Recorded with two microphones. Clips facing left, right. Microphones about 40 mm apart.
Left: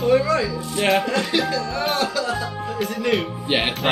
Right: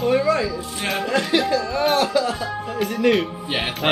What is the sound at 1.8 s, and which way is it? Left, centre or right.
Speech, centre.